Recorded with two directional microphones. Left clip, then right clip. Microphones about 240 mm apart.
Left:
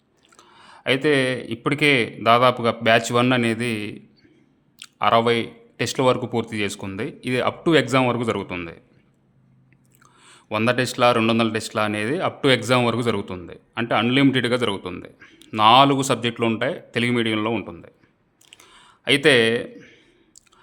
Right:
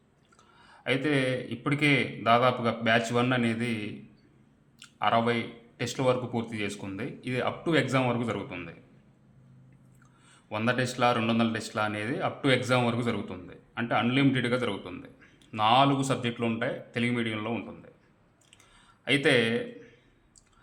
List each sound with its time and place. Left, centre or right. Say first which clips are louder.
0.3 s speech: left 8 dB; left
10.0 s speech: left 10 dB; left
18.5 s a sound: left 10 dB; left